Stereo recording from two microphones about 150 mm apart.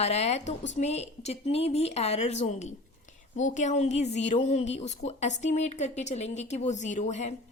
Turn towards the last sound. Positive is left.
turn(degrees=50)  # may be behind; listen again after turning